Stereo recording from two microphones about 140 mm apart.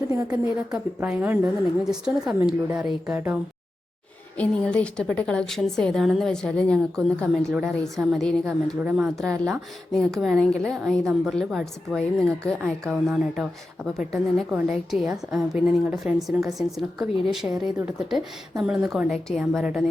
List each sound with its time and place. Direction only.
0.1 s a woman's voice: 25° right (ahead or behind)
0.9 s a woman's voice: 10° right (ahead or behind)
4.4 s a woman's voice: 10° left (ahead or behind)
8.8 s a woman's voice: 10° right (ahead or behind)